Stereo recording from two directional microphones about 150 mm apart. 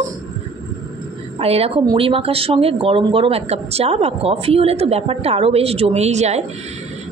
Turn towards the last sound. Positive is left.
turn(degrees=-50)  # may be behind; listen again after turning